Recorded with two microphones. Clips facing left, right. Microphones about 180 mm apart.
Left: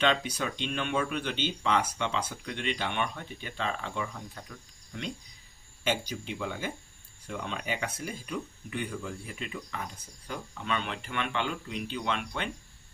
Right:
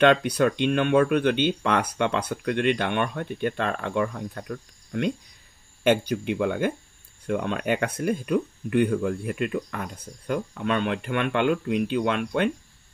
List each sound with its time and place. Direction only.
0.0 s speech: 60° right (ahead or behind)